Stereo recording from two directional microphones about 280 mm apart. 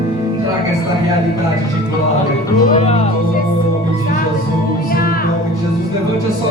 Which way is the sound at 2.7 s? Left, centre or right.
Left.